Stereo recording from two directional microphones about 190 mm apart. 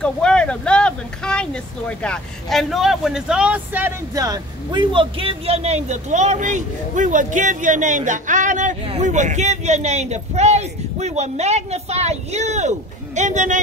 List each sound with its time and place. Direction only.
0.0 s speech: 5° left (ahead or behind); by 13.6 s 40° right (ahead or behind)